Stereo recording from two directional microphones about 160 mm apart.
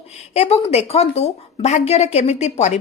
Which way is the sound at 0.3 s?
40° left (ahead or behind).